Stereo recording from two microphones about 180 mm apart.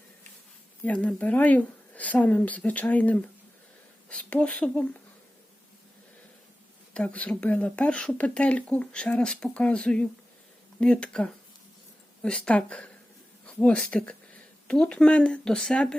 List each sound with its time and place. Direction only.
0.9 s speech: 5° left (ahead or behind)
6.9 s speech: 5° left (ahead or behind)